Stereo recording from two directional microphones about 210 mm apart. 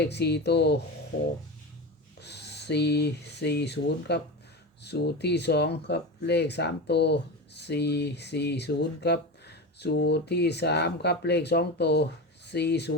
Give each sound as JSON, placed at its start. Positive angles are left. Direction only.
{"t": 0.0, "sound": "speech", "side_deg": 50}
{"t": 2.2, "sound": "speech", "side_deg": 55}